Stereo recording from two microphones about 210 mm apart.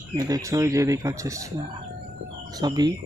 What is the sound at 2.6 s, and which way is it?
Speech, 20° right (ahead or behind).